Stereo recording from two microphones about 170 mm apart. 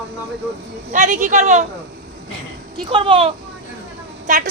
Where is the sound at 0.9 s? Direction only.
45° right (ahead or behind).